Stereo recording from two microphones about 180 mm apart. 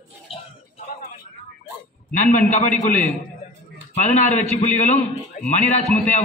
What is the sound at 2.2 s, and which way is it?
A man's voice, 45° left (ahead or behind).